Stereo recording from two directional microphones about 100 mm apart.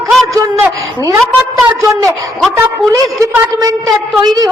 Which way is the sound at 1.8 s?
30° right (ahead or behind).